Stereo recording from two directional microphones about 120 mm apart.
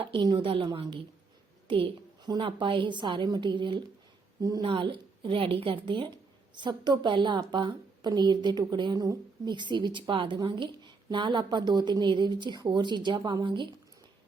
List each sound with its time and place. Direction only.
0.0 s a woman's voice: 45° right (ahead or behind)
4.4 s a woman's voice: 30° right (ahead or behind)
4.7 s a woman's voice: 45° right (ahead or behind)